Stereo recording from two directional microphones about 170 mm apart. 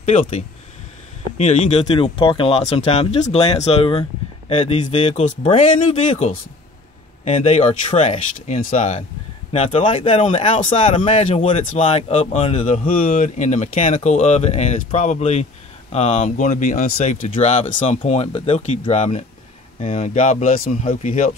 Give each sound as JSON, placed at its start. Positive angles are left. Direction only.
{"t": 0.0, "sound": "speech", "side_deg": 40}
{"t": 1.4, "sound": "speech", "side_deg": 45}
{"t": 5.2, "sound": "speech", "side_deg": 45}
{"t": 10.2, "sound": "speech", "side_deg": 45}
{"t": 12.6, "sound": "speech", "side_deg": 50}
{"t": 16.3, "sound": "speech", "side_deg": 45}
{"t": 20.2, "sound": "speech", "side_deg": 45}
{"t": 21.0, "sound": "speech", "side_deg": 40}